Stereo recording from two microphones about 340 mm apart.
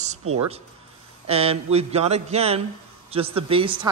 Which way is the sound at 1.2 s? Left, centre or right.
Centre.